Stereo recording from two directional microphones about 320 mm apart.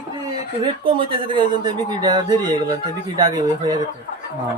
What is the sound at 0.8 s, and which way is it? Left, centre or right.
Speech, centre.